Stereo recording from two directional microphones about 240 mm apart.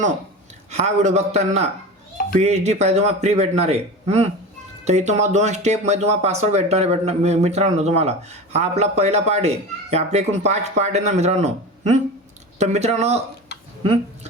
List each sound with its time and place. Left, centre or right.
0.7 s speech: right